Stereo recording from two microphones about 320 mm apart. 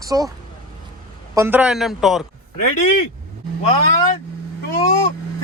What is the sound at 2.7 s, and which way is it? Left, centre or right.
Speech, left.